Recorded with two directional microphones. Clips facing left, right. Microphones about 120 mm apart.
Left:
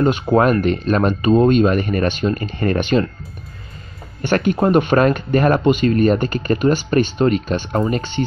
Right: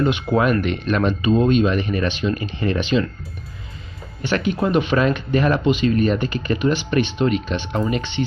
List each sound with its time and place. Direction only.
0.0 s speech: 40° left (ahead or behind)
4.2 s speech: 50° left (ahead or behind)